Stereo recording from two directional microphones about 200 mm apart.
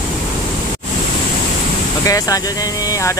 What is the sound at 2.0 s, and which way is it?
Speech, 15° left (ahead or behind).